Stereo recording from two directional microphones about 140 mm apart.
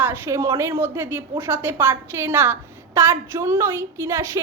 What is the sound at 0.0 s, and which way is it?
A woman's voice, 20° right (ahead or behind).